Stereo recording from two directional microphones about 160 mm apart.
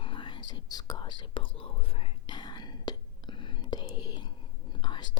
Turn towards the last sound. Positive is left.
turn(degrees=25)  # may be behind; listen again after turning